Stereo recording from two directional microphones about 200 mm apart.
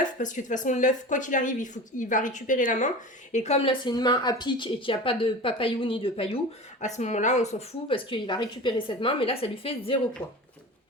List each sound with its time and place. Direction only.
0.0 s speech: 40° left (ahead or behind); by 10.3 s 20° left (ahead or behind)